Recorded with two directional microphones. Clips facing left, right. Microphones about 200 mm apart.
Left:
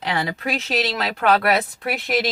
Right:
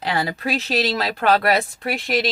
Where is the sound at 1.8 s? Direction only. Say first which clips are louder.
Even; centre (ahead or behind).